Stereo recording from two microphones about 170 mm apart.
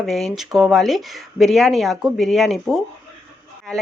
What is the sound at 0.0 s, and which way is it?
Speech, centre (ahead or behind).